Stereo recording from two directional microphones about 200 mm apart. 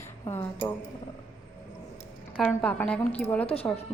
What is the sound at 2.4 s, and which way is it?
Speech, 5° left (ahead or behind).